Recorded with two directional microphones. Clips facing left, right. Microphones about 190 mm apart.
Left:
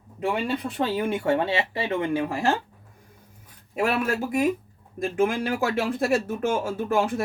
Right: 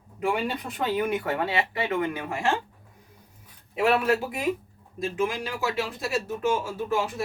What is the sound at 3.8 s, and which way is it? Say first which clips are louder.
Speech: right 2 dB; 45° left (ahead or behind).